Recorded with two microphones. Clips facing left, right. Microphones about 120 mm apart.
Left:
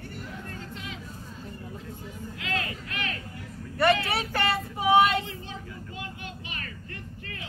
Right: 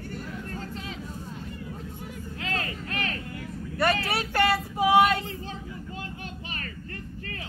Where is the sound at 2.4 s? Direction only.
35° right (ahead or behind).